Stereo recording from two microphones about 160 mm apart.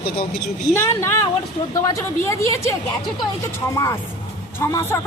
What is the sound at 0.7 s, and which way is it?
A woman's voice, 15° left (ahead or behind).